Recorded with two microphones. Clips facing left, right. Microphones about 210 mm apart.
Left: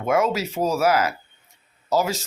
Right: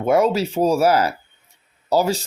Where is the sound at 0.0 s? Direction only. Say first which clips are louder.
Right 4 dB; 35° right (ahead or behind).